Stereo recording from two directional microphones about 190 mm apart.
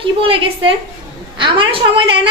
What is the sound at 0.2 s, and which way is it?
A woman's voice, 30° right (ahead or behind).